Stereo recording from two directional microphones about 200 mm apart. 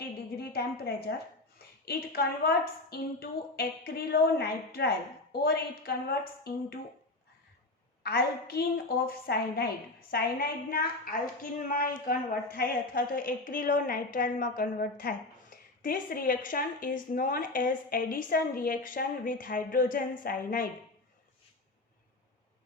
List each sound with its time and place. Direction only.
0.3 s a sound: 50° left (ahead or behind)
1.8 s a woman's voice: 50° left (ahead or behind)
8.0 s a woman's voice: 50° left (ahead or behind)